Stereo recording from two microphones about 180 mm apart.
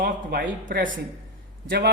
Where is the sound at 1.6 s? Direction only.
65° right (ahead or behind).